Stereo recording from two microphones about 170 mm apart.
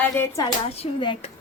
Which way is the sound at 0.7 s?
30° left (ahead or behind).